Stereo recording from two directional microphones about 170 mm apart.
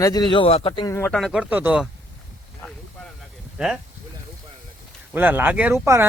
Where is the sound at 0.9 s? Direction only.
15° left (ahead or behind).